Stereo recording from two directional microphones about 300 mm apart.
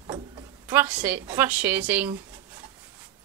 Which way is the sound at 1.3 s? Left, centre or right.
Centre.